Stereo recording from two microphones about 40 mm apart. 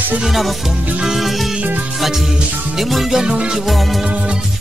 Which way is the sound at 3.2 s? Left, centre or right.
Centre.